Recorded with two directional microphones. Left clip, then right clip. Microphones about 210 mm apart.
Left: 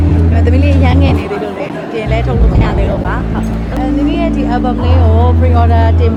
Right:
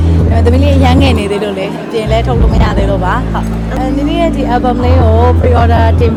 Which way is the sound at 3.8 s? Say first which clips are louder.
Right 2 dB; 30° right (ahead or behind).